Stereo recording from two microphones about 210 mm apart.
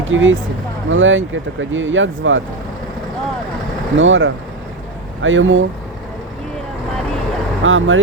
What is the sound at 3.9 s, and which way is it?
Speech, 65° right (ahead or behind).